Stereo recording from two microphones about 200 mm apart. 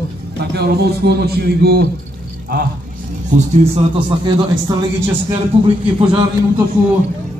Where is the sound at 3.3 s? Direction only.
35° right (ahead or behind).